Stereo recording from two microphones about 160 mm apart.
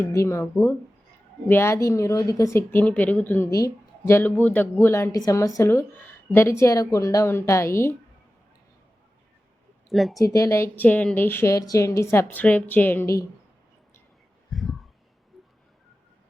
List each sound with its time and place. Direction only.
0.0 s speech: 20° left (ahead or behind)
1.5 s speech: 15° left (ahead or behind)
9.9 s speech: centre (ahead or behind)
10.2 s speech: 20° left (ahead or behind)
14.5 s a sound: centre (ahead or behind)